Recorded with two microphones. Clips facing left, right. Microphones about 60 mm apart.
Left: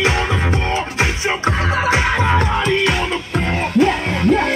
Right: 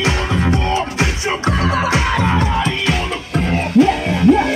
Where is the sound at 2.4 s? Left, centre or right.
Left.